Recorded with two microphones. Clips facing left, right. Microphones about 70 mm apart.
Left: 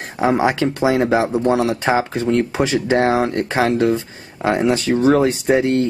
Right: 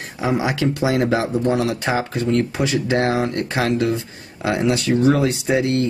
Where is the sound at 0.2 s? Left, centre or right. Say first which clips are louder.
Left 4 dB; left.